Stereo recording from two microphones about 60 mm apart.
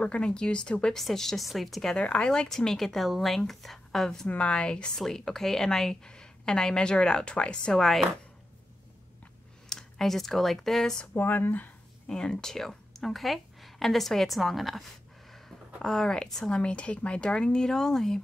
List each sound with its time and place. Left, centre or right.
0.0 s a woman's voice: centre
2.0 s a woman's voice: centre
4.3 s a woman's voice: left
7.7 s a woman's voice: centre
9.7 s speech: centre
11.1 s speech: left
12.1 s a woman's voice: centre